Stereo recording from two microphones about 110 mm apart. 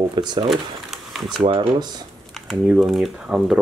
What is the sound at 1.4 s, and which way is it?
Speech, 55° right (ahead or behind).